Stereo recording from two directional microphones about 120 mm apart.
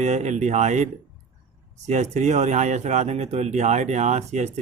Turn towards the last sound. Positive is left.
turn(degrees=-70)  # may be behind; listen again after turning